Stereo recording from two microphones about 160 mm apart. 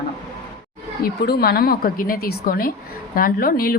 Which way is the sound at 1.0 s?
75° left (ahead or behind).